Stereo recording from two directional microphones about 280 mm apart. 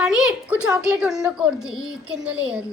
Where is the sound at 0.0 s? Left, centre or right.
Centre.